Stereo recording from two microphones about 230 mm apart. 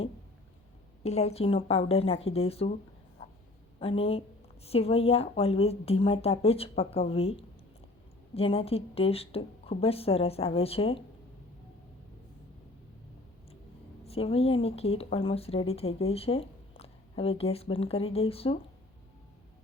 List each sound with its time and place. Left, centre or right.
1.0 s a woman's voice: left
3.8 s a woman's voice: left
14.0 s a woman's voice: left